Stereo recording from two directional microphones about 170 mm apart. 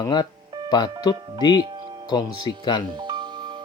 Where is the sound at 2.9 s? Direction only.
25° right (ahead or behind).